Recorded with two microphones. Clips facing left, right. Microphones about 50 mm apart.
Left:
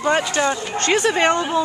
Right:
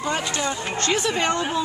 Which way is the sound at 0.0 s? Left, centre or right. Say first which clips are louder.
Left 6 dB; left.